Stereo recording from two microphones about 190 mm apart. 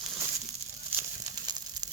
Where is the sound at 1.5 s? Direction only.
20° right (ahead or behind).